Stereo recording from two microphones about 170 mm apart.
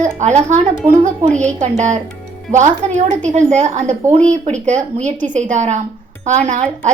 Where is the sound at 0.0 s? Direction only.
45° right (ahead or behind).